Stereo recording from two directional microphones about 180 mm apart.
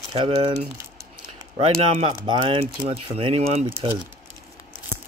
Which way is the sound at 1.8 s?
35° right (ahead or behind).